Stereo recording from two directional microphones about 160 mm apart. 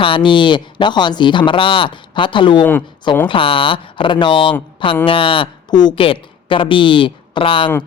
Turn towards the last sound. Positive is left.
turn(degrees=30)  # may be behind; listen again after turning